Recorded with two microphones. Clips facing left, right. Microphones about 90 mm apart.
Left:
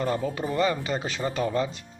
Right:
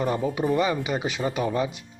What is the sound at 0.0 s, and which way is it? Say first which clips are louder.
Speech: right 3 dB; 15° right (ahead or behind).